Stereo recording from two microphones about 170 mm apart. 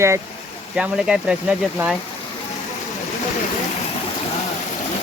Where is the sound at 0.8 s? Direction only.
5° right (ahead or behind).